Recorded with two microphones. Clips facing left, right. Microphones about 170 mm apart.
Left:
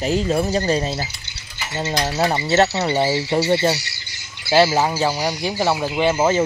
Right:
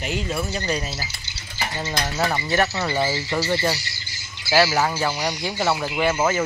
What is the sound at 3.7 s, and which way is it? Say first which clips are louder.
Bird: left 4 dB; 70° left (ahead or behind).